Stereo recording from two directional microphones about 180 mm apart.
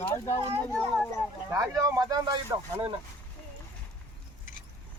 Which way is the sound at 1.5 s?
15° right (ahead or behind).